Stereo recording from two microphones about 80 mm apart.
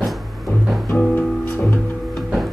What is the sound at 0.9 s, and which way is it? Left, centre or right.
Music, centre.